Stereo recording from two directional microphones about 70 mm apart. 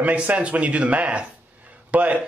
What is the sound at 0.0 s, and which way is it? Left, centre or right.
A man's voice, centre.